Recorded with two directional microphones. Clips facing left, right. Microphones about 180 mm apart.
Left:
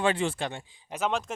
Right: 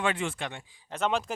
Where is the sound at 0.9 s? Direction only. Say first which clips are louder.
Right 1 dB; 5° left (ahead or behind).